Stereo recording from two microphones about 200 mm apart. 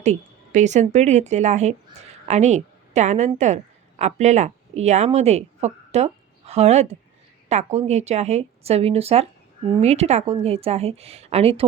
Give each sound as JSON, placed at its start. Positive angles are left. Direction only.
{"t": 0.0, "sound": "a woman's voice", "side_deg": -35}